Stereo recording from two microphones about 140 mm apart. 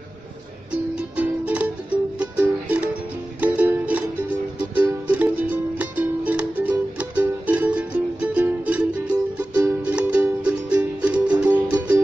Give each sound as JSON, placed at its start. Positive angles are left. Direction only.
{"t": 1.1, "sound": "music", "side_deg": -10}